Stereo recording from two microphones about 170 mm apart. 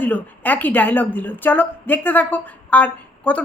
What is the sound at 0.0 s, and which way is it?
A woman's voice, 10° left (ahead or behind).